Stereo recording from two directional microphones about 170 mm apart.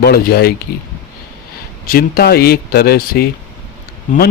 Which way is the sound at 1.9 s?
65° left (ahead or behind).